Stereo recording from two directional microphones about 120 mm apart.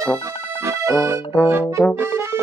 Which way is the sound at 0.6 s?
25° right (ahead or behind).